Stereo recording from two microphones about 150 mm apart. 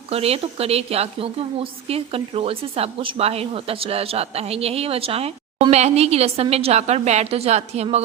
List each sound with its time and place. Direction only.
0.1 s a woman's voice: 40° right (ahead or behind)